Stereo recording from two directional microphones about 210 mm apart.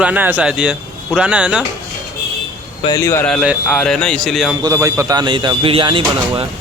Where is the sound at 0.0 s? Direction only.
5° right (ahead or behind).